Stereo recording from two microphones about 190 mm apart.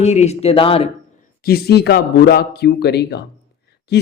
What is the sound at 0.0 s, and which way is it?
Speech, 35° left (ahead or behind).